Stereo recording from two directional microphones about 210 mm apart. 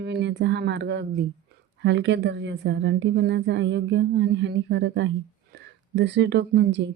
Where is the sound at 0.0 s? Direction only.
55° right (ahead or behind).